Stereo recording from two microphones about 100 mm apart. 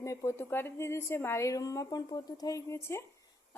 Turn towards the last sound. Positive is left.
turn(degrees=25)  # may be behind; listen again after turning